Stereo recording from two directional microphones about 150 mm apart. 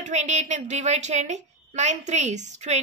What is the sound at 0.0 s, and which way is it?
A woman's voice, 50° right (ahead or behind).